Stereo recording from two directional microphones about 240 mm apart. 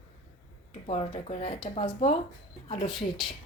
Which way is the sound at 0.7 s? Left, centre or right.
Left.